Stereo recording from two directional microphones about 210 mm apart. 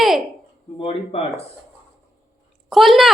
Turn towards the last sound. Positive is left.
turn(degrees=0)  # may be behind; listen again after turning